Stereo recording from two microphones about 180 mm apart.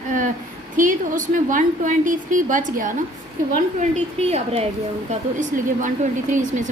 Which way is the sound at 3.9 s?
35° right (ahead or behind).